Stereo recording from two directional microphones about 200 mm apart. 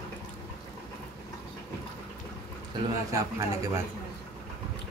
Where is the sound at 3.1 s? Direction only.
15° right (ahead or behind).